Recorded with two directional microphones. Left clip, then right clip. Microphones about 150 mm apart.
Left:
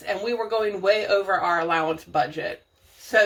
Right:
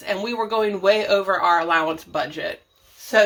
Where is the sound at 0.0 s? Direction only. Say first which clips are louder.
Right 2 dB; 30° right (ahead or behind).